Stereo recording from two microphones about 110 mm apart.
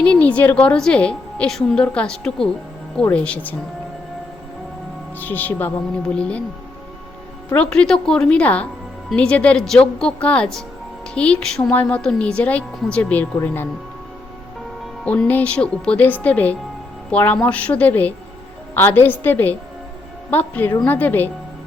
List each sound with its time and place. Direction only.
0.0 s a woman's voice: 10° left (ahead or behind)
5.2 s a woman's voice: 15° left (ahead or behind)
7.5 s a woman's voice: 10° left (ahead or behind)
15.0 s a woman's voice: 15° left (ahead or behind)